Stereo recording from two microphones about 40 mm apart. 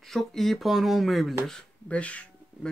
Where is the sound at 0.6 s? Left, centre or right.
Centre.